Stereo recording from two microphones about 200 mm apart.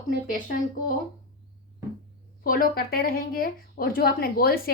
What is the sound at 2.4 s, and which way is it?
Speech, 45° left (ahead or behind).